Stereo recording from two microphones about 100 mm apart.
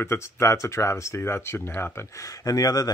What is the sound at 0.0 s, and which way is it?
Speech, 25° left (ahead or behind).